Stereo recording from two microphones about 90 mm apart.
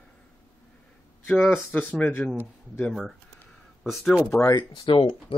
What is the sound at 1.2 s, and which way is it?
Speech, 20° left (ahead or behind).